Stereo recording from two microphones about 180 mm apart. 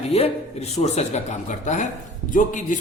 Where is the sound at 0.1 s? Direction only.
35° left (ahead or behind).